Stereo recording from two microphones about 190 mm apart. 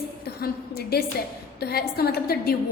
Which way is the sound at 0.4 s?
55° left (ahead or behind).